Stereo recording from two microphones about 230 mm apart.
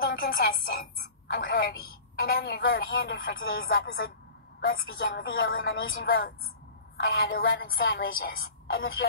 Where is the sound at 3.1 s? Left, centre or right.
Left.